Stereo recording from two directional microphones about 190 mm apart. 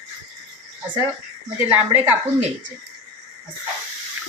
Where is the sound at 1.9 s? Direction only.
10° right (ahead or behind).